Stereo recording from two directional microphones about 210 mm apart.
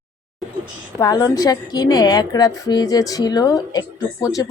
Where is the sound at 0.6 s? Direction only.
15° left (ahead or behind).